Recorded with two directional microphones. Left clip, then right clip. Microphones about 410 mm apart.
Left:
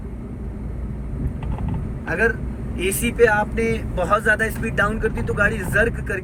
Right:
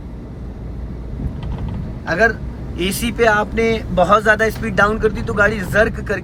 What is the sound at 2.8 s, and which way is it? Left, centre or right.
Speech, centre.